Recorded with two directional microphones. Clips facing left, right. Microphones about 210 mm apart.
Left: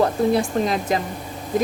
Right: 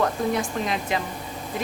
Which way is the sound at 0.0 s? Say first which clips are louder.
Left 5 dB; 35° left (ahead or behind).